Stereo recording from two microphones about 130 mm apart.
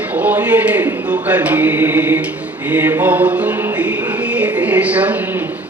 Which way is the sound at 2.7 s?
15° right (ahead or behind).